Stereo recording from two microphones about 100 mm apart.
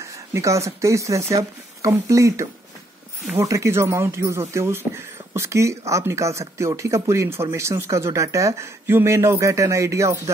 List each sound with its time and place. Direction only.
0.3 s speech: 30° right (ahead or behind)